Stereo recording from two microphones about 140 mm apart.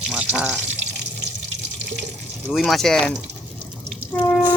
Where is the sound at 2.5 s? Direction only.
Centre (ahead or behind).